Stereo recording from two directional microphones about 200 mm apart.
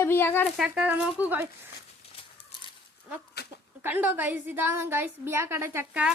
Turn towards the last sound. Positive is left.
turn(degrees=-5)  # may be behind; listen again after turning